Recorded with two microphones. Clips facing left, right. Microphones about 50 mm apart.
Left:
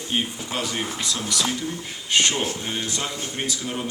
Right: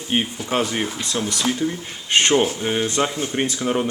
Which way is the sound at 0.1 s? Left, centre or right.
Right.